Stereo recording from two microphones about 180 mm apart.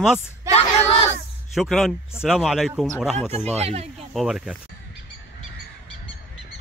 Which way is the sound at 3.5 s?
35° right (ahead or behind).